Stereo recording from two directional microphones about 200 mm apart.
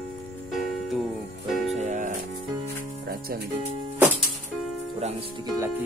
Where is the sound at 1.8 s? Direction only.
35° right (ahead or behind).